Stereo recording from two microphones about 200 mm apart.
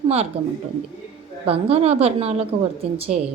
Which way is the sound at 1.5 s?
30° right (ahead or behind).